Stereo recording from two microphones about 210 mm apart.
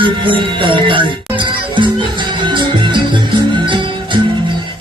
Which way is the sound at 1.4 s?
20° right (ahead or behind).